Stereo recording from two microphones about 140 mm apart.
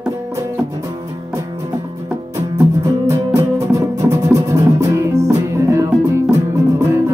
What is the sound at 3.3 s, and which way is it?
Music, 20° right (ahead or behind).